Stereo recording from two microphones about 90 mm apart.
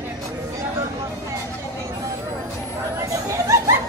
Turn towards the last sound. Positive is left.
turn(degrees=-35)  # may be behind; listen again after turning